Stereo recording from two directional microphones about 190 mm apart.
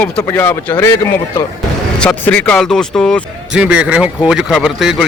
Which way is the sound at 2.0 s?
5° left (ahead or behind).